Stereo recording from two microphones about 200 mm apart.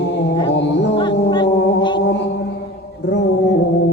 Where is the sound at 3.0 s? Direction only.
60° left (ahead or behind).